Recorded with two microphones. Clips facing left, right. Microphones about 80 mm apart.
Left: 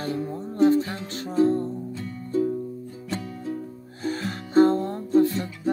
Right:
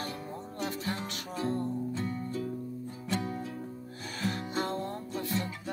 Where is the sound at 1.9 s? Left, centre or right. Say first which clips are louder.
Even; right.